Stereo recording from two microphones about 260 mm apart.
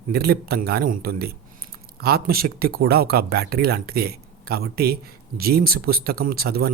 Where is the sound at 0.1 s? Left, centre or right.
Right.